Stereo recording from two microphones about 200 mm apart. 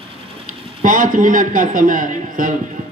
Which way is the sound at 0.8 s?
45° right (ahead or behind).